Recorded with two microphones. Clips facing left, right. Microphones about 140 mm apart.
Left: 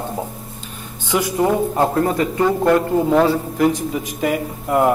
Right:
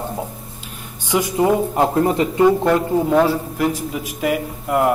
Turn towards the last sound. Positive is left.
turn(degrees=0)  # may be behind; listen again after turning